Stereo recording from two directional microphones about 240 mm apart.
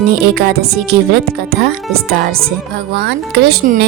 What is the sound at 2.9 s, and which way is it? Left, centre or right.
Speech, right.